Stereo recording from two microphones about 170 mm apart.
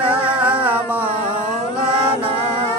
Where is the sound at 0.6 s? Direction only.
10° right (ahead or behind).